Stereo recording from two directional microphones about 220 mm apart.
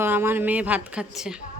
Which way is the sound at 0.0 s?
10° right (ahead or behind).